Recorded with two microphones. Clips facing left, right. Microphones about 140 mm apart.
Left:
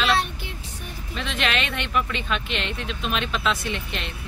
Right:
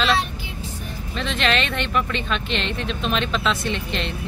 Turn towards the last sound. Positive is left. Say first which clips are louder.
# right 5 dB
turn(degrees=10)  # may be behind; listen again after turning